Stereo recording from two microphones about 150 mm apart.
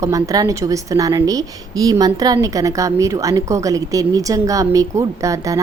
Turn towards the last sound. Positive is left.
turn(degrees=-20)  # may be behind; listen again after turning